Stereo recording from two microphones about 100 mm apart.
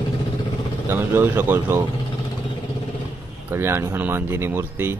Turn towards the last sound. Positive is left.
turn(degrees=-25)  # may be behind; listen again after turning